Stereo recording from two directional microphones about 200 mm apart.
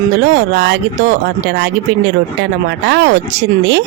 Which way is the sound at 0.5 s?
55° right (ahead or behind).